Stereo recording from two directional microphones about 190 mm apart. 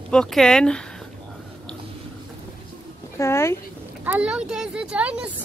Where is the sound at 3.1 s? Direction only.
15° left (ahead or behind).